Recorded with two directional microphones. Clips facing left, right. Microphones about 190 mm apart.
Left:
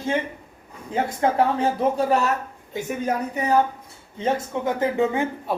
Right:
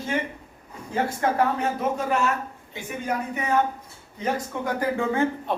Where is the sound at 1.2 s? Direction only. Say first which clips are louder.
Left 4 dB; 30° left (ahead or behind).